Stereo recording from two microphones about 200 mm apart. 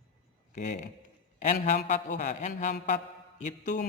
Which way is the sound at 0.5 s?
35° left (ahead or behind).